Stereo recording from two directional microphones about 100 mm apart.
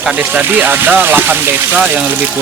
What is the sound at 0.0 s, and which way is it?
Speech, 15° right (ahead or behind).